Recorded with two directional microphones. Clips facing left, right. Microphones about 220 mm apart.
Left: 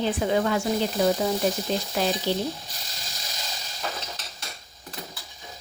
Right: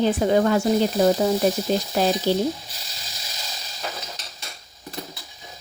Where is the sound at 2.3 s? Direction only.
40° right (ahead or behind).